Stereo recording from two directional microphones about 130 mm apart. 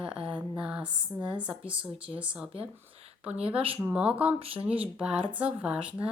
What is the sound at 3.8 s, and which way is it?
Speech, 10° right (ahead or behind).